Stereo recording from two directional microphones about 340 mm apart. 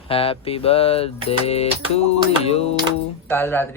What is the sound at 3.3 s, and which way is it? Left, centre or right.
Speech, centre.